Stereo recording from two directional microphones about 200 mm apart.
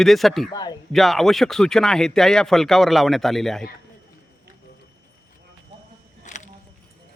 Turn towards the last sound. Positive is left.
turn(degrees=35)  # may be behind; listen again after turning